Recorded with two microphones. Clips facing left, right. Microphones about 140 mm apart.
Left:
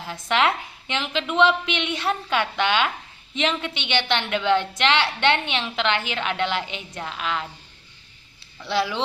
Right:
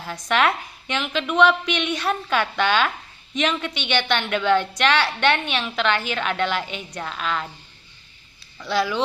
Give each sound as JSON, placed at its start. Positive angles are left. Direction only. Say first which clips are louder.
{"t": 0.0, "sound": "a woman's voice", "louder": "right 1 dB", "side_deg": 20}
{"t": 8.5, "sound": "speech", "louder": "right 1 dB", "side_deg": 25}